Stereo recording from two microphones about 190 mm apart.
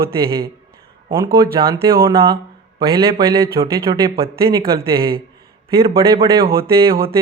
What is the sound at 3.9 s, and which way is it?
Speech, 25° right (ahead or behind).